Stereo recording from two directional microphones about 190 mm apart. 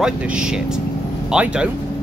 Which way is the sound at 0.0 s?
5° right (ahead or behind).